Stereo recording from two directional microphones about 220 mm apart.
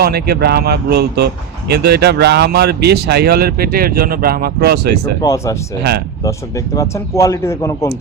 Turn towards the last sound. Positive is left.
turn(degrees=10)  # may be behind; listen again after turning